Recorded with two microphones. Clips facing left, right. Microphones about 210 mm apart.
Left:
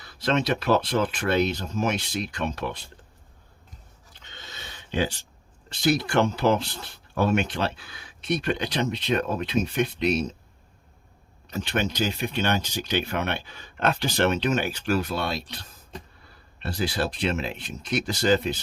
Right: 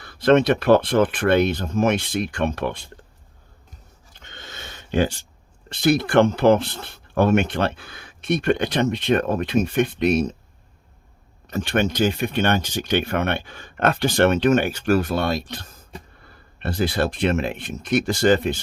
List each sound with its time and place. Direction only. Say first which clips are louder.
0.0 s speech: right 9 dB; 55° right (ahead or behind)
4.2 s a sound: right 4 dB; 55° right (ahead or behind)
5.6 s speech: right 4 dB; 55° right (ahead or behind)
11.4 s speech: right 5 dB; 55° right (ahead or behind)